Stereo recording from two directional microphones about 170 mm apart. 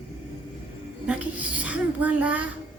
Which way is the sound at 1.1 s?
10° right (ahead or behind).